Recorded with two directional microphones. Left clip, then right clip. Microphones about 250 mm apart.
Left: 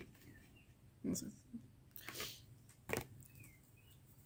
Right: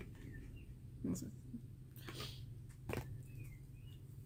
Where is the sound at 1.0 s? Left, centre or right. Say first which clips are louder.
Left 1 dB; left.